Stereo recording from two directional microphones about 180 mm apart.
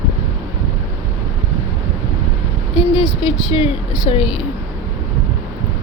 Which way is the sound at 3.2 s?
30° left (ahead or behind).